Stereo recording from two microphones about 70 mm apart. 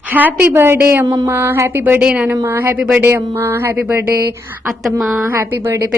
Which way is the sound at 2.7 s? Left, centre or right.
Centre.